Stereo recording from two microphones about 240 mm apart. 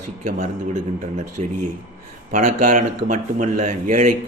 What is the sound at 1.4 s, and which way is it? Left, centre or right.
Speech, right.